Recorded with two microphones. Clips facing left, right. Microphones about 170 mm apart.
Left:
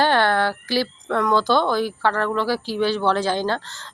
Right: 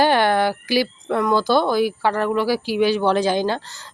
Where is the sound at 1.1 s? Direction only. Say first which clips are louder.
Right 1 dB; 10° right (ahead or behind).